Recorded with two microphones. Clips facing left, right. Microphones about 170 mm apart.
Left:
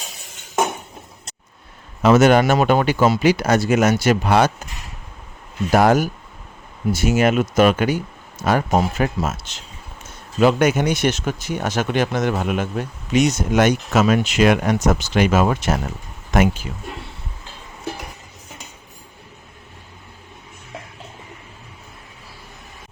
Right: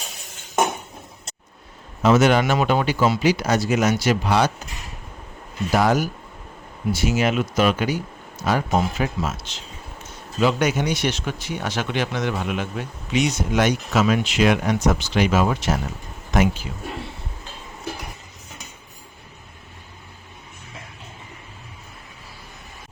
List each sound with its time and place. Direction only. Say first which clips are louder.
2.0 s speech: left 3 dB; 55° left (ahead or behind)
5.7 s speech: left 4 dB; 50° left (ahead or behind)